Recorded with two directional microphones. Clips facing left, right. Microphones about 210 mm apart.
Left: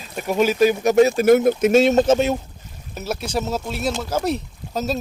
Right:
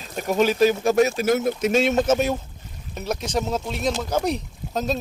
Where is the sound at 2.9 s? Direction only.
5° left (ahead or behind).